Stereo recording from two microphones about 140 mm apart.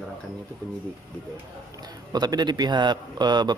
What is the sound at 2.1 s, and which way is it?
A man's voice, 30° right (ahead or behind).